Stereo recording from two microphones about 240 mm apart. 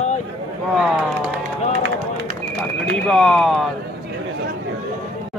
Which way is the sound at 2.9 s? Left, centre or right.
Centre.